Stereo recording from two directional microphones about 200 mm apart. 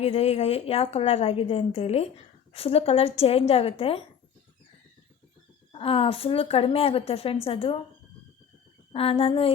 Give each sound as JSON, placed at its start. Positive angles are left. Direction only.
{"t": 0.0, "sound": "a woman's voice", "side_deg": 30}
{"t": 5.7, "sound": "a woman's voice", "side_deg": 25}
{"t": 8.9, "sound": "a woman's voice", "side_deg": 30}